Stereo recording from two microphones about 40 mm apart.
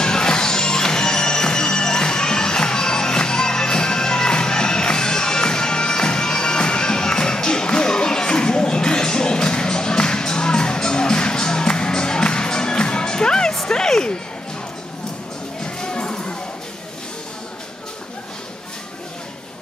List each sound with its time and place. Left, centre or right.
0.0 s music: centre
13.7 s a sound: centre
15.6 s music: left